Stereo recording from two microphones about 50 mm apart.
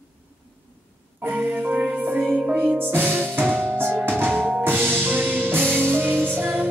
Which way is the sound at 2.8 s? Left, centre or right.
Right.